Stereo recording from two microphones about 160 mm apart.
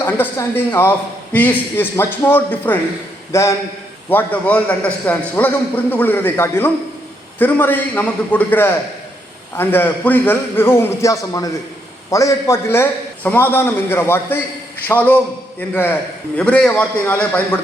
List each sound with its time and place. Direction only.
0.0 s a man's voice: 15° left (ahead or behind)